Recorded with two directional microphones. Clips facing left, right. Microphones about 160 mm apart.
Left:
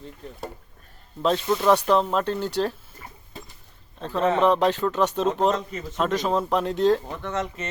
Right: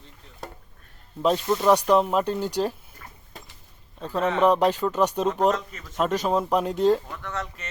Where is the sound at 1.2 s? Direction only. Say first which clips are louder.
Even; 10° right (ahead or behind).